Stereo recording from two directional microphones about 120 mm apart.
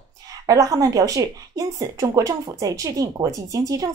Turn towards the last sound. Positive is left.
turn(degrees=-30)  # may be behind; listen again after turning